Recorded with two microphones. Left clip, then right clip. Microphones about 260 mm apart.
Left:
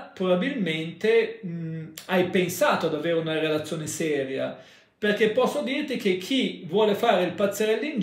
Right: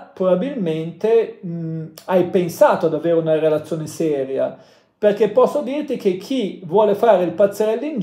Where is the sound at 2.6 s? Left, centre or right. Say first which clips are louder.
Right 10 dB; centre.